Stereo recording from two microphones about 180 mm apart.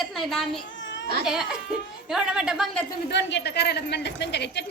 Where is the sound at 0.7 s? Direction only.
90° left.